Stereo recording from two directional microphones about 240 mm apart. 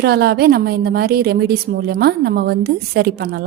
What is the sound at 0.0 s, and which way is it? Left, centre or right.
A woman's voice, right.